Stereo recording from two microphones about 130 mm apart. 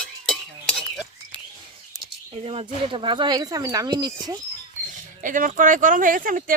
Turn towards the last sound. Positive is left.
turn(degrees=-90)